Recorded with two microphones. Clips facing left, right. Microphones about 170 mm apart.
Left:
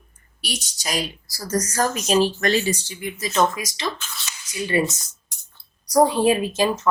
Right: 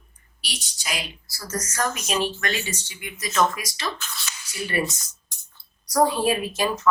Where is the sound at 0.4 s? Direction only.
45° left (ahead or behind).